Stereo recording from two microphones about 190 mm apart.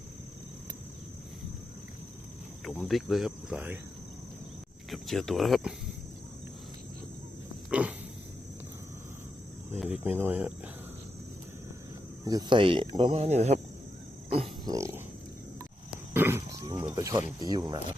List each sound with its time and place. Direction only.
2.6 s cricket: centre (ahead or behind)
4.9 s cricket: centre (ahead or behind)
7.7 s pig: 5° right (ahead or behind)
9.7 s speech: 5° right (ahead or behind)
12.2 s speech: 20° right (ahead or behind)
14.3 s wild animals: 30° right (ahead or behind)
14.7 s speech: 15° right (ahead or behind)
16.1 s wild animals: 10° right (ahead or behind)
16.9 s speech: 15° right (ahead or behind)